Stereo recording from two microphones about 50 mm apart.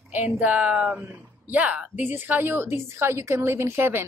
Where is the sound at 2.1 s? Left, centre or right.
Right.